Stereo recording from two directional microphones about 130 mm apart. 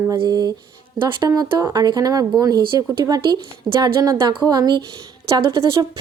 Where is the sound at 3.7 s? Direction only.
30° right (ahead or behind).